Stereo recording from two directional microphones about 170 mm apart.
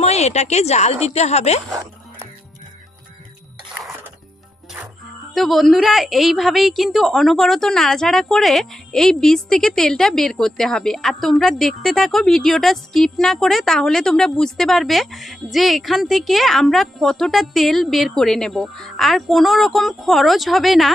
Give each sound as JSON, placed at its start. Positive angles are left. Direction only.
{"t": 0.0, "sound": "a woman's voice", "side_deg": 40}
{"t": 5.3, "sound": "a woman's voice", "side_deg": 0}